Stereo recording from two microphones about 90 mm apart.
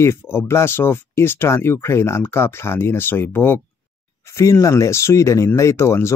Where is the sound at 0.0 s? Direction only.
25° left (ahead or behind).